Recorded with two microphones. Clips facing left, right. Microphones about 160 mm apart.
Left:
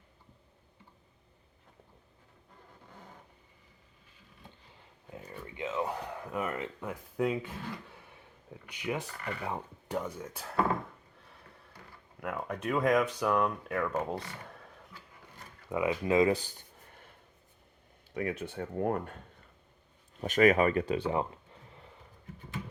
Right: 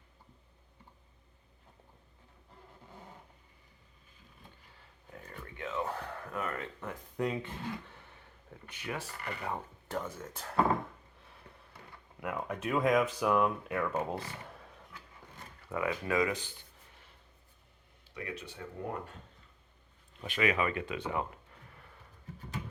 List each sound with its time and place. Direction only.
5.2 s a sound: 15° left (ahead or behind)
7.2 s speech: 5° left (ahead or behind)
12.2 s speech: centre (ahead or behind)
15.7 s speech: 20° left (ahead or behind); by 16.6 s 35° left (ahead or behind)
16.9 s writing: 55° left (ahead or behind)
18.1 s speech: 50° left (ahead or behind)
20.2 s speech: 45° left (ahead or behind); by 21.8 s 25° left (ahead or behind)